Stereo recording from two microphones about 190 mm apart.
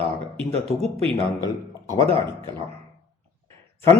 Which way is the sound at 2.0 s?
15° left (ahead or behind).